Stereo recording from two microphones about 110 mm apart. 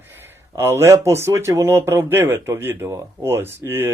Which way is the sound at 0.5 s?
25° right (ahead or behind).